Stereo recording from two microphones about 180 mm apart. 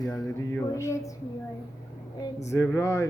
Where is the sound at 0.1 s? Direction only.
10° left (ahead or behind).